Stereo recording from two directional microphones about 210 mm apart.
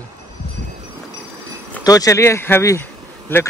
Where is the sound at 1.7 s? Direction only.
15° left (ahead or behind).